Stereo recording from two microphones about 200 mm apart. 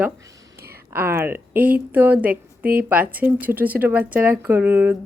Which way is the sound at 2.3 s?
45° right (ahead or behind).